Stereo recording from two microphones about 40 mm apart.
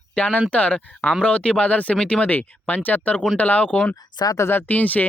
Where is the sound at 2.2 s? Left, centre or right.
Left.